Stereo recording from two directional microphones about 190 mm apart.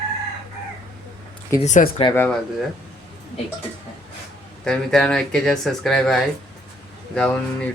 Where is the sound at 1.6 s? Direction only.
40° left (ahead or behind).